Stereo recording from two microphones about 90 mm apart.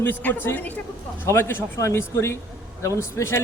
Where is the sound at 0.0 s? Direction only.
20° left (ahead or behind).